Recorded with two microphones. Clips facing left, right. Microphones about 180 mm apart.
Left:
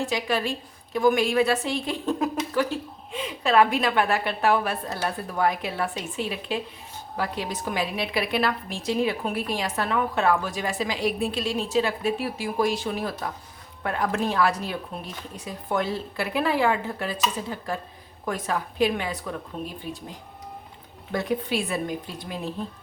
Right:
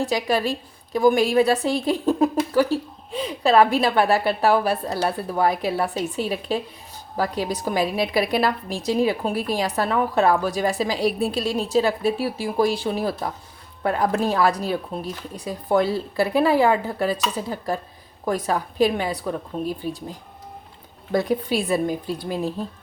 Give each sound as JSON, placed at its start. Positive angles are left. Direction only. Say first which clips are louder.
{"t": 0.0, "sound": "a woman's voice", "louder": "right 4 dB", "side_deg": -35}
{"t": 21.1, "sound": "a woman's voice", "louder": "right 5 dB", "side_deg": -35}